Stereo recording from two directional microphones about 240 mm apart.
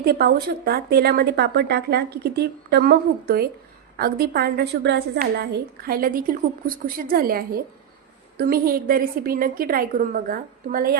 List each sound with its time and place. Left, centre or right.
0.0 s a woman's voice: right